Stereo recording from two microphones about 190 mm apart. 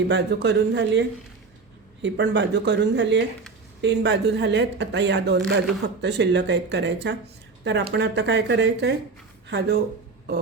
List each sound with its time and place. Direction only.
0.1 s a woman's voice: 60° right (ahead or behind)